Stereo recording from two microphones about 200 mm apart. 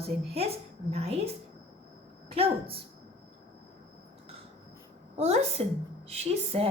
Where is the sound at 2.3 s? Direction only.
30° right (ahead or behind).